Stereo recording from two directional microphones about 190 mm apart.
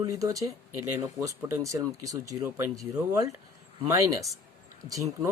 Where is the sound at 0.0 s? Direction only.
20° right (ahead or behind).